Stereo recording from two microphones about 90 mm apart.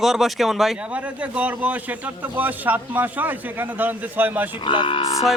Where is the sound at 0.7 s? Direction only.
15° right (ahead or behind).